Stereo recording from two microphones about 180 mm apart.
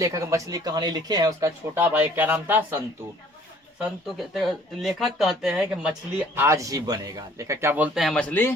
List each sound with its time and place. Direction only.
0.0 s speech: 20° right (ahead or behind)
3.8 s speech: centre (ahead or behind)
6.3 s speech: 15° right (ahead or behind)
7.9 s speech: centre (ahead or behind)